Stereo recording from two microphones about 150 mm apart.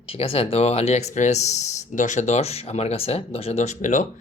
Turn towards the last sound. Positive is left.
turn(degrees=55)  # may be behind; listen again after turning